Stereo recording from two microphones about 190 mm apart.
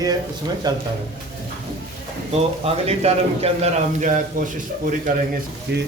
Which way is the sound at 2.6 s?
30° right (ahead or behind).